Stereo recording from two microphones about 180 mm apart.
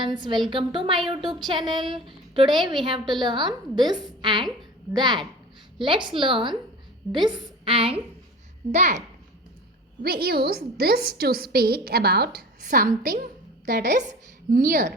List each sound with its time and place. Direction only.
0.0 s a woman's voice: 25° right (ahead or behind)
8.7 s a woman's voice: 40° right (ahead or behind)
10.0 s a woman's voice: 60° right (ahead or behind)